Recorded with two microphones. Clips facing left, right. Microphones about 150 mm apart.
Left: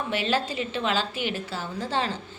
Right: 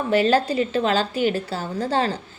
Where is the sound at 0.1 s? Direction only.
40° right (ahead or behind).